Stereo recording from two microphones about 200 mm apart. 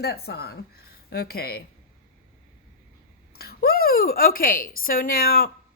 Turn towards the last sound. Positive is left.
turn(degrees=50)  # may be behind; listen again after turning